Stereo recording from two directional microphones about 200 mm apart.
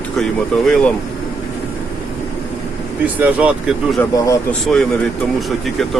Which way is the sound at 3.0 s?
5° right (ahead or behind).